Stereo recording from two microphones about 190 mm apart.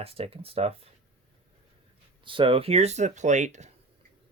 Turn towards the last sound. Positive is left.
turn(degrees=-35)  # may be behind; listen again after turning